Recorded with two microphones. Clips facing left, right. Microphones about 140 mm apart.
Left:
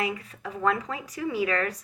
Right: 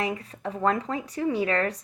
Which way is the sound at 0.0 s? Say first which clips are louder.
Right 1 dB; 35° right (ahead or behind).